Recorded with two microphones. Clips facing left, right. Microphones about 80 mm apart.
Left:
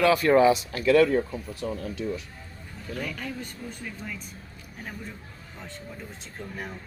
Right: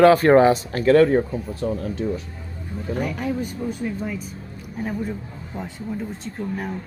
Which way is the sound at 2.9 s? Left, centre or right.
Centre.